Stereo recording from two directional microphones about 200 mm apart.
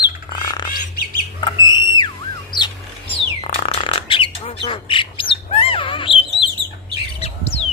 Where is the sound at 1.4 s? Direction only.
20° left (ahead or behind).